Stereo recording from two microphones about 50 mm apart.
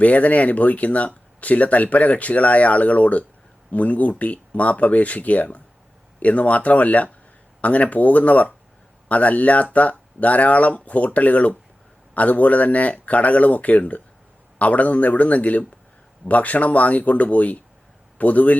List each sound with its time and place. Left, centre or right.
0.0 s speech: left